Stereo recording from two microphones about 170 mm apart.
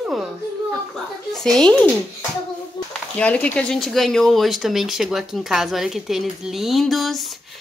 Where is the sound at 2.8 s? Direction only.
25° left (ahead or behind).